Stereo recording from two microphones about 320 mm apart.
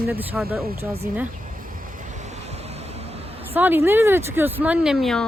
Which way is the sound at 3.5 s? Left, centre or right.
Centre.